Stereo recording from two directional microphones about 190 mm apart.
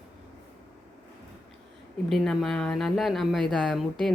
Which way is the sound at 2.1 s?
Centre (ahead or behind).